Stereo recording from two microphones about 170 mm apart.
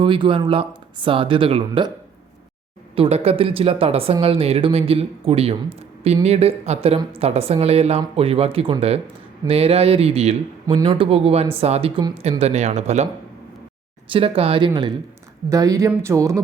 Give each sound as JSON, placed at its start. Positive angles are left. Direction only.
{"t": 0.0, "sound": "speech", "side_deg": -30}
{"t": 2.9, "sound": "speech", "side_deg": -35}
{"t": 14.1, "sound": "speech", "side_deg": -35}